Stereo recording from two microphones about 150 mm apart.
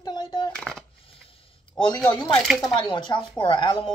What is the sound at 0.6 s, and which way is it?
Speech, 5° left (ahead or behind).